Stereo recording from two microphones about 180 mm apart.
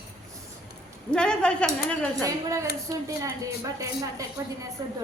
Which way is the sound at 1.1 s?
5° left (ahead or behind).